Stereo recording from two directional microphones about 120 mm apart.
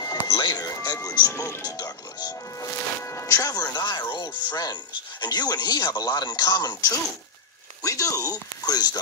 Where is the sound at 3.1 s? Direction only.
25° left (ahead or behind).